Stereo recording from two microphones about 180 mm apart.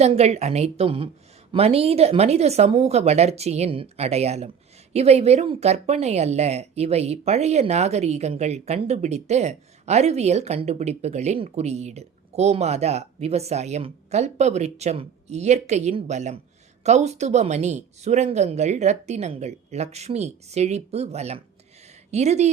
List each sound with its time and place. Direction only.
0.0 s speech: 35° right (ahead or behind)